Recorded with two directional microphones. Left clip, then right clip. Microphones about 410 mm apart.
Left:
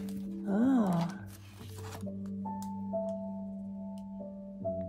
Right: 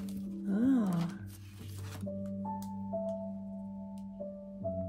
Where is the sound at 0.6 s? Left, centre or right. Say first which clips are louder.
Left 2 dB; centre.